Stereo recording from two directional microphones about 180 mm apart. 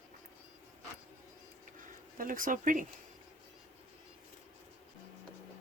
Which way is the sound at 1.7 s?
50° right (ahead or behind).